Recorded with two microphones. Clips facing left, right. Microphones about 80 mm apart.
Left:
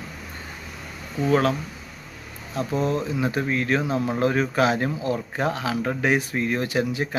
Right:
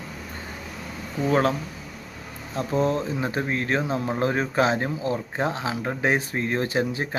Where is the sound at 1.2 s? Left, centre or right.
Right.